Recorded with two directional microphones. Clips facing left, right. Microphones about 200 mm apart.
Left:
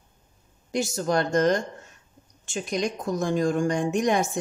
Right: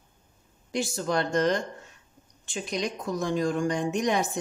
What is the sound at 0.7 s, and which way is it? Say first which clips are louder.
A woman's voice: left 3 dB; 45° left (ahead or behind).